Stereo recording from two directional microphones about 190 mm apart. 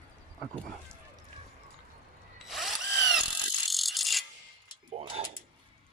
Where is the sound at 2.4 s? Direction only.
Centre (ahead or behind).